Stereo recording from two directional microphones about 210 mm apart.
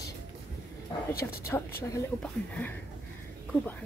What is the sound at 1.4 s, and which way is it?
Speech, 15° left (ahead or behind).